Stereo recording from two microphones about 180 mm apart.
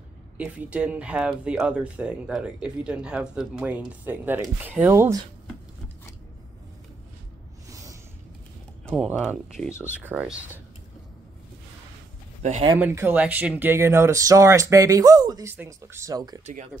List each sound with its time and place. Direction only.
0.4 s speech: 10° right (ahead or behind)
7.7 s a sound: 20° right (ahead or behind)
8.8 s speech: 5° right (ahead or behind)
12.4 s speech: 40° right (ahead or behind)
12.7 s speech: 10° right (ahead or behind)